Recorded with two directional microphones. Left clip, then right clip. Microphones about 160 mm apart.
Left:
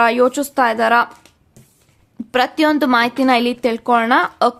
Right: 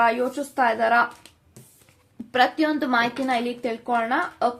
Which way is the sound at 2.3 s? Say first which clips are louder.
Left 5 dB; 45° left (ahead or behind).